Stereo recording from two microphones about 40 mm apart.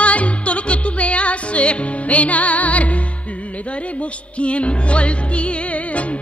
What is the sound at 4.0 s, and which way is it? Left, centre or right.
Music, left.